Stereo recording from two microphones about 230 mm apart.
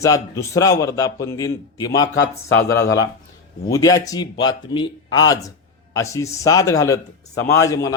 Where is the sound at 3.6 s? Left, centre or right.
Centre.